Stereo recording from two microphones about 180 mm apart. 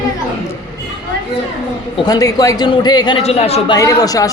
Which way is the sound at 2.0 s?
20° left (ahead or behind).